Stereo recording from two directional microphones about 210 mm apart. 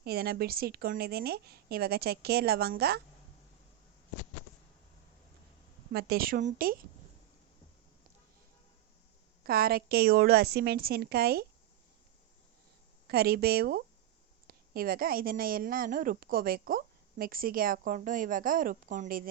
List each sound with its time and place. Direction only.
0.0 s a woman's voice: 50° right (ahead or behind)
5.9 s a woman's voice: 50° right (ahead or behind)
9.4 s a woman's voice: 45° right (ahead or behind)
13.1 s a woman's voice: 50° right (ahead or behind)